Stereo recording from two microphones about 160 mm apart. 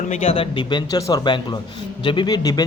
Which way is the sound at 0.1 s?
40° left (ahead or behind).